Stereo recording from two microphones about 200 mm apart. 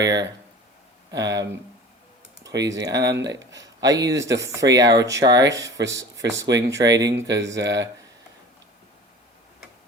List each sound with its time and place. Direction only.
0.0 s speech: 20° right (ahead or behind)
2.5 s speech: 15° right (ahead or behind)
3.0 s speech: 60° right (ahead or behind)
3.2 s speech: 20° right (ahead or behind)
7.3 s speech: 60° right (ahead or behind)